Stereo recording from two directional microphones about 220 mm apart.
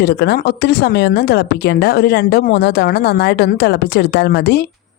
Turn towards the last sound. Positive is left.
turn(degrees=50)  # may be behind; listen again after turning